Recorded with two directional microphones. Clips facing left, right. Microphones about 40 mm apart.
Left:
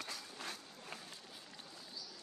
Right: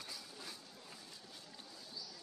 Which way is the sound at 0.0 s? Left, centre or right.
Left.